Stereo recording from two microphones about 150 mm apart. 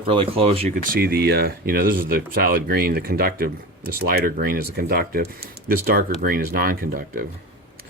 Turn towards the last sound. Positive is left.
turn(degrees=-75)  # may be behind; listen again after turning